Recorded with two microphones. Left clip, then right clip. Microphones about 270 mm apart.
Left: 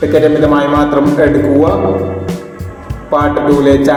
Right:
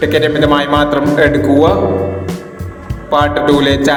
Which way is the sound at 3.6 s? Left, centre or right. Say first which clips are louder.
Left 3 dB; right.